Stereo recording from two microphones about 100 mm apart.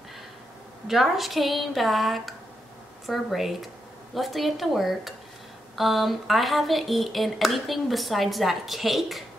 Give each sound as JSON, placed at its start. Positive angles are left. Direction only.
{"t": 0.8, "sound": "a woman's voice", "side_deg": 0}